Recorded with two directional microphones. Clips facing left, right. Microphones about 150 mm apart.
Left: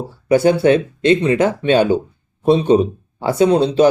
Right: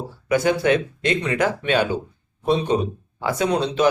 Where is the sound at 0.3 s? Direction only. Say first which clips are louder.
Left 6 dB; 30° left (ahead or behind).